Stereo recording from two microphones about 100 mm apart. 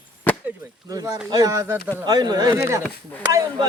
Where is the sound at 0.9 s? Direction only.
40° right (ahead or behind).